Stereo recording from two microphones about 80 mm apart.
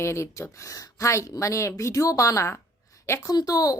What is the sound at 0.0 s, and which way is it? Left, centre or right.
A woman's voice, left.